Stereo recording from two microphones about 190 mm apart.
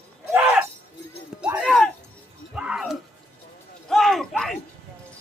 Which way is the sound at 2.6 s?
5° right (ahead or behind).